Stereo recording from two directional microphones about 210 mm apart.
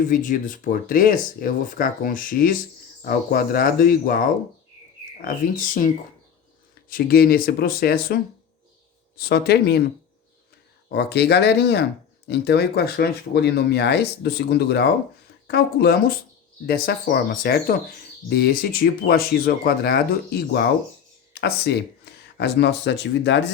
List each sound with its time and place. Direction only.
0.1 s speech: 40° left (ahead or behind)
5.2 s speech: 40° left (ahead or behind)
10.9 s speech: 50° left (ahead or behind)